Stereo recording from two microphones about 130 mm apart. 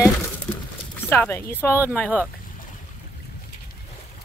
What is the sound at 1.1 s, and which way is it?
Speech, 15° left (ahead or behind).